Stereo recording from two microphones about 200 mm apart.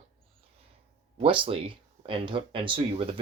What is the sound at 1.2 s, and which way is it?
Speech, 25° right (ahead or behind).